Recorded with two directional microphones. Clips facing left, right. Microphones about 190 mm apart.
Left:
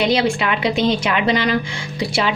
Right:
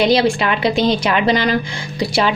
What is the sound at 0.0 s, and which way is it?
A woman's voice, 35° right (ahead or behind).